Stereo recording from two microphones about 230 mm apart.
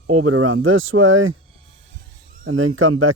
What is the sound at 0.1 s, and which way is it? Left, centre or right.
Speech, right.